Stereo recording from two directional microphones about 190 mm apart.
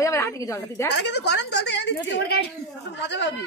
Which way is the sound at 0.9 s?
65° left (ahead or behind).